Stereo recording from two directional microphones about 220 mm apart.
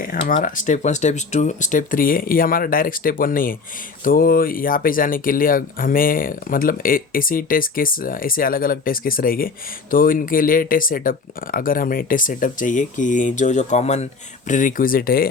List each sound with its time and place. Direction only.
0.4 s speech: 35° left (ahead or behind)